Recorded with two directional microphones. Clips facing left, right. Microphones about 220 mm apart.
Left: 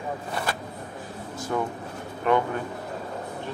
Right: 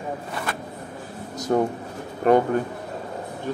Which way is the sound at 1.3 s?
40° right (ahead or behind).